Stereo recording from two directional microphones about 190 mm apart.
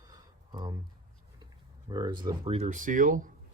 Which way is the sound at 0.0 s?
20° right (ahead or behind).